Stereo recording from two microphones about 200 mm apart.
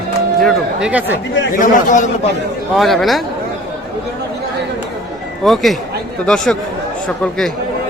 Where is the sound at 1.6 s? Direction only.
40° left (ahead or behind).